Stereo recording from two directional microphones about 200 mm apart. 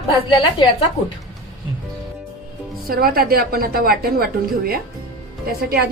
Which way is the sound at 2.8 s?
45° right (ahead or behind).